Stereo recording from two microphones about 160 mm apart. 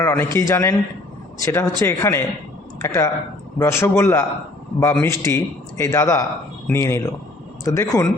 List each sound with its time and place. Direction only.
0.0 s a man's voice: 15° left (ahead or behind)